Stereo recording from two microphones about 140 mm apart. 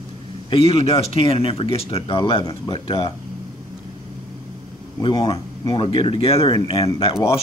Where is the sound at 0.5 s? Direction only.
40° left (ahead or behind).